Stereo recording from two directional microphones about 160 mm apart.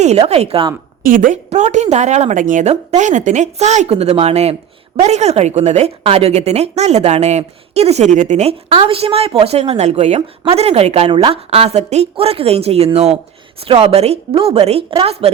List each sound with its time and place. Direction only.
0.0 s speech: 40° right (ahead or behind)
1.0 s a woman's voice: 55° right (ahead or behind)
1.5 s a woman's voice: 45° right (ahead or behind)